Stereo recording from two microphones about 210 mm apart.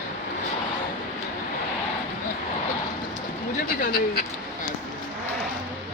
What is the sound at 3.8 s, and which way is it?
Speech, 45° left (ahead or behind).